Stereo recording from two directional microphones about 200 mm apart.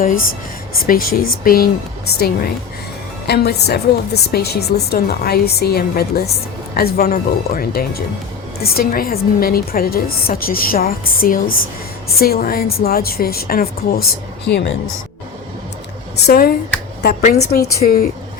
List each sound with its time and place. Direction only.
0.9 s a woman's voice: 45° left (ahead or behind)
16.3 s a woman's voice: 50° left (ahead or behind)